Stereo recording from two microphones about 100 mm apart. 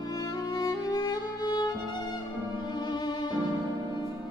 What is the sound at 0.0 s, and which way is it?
Music, 40° left (ahead or behind).